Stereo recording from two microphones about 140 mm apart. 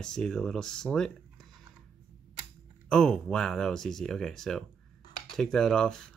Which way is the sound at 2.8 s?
5° left (ahead or behind).